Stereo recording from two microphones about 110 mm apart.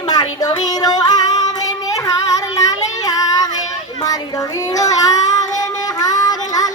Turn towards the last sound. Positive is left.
turn(degrees=35)  # may be behind; listen again after turning